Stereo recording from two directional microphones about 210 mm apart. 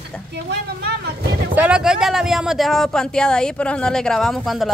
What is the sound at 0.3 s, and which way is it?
Speech, 50° right (ahead or behind).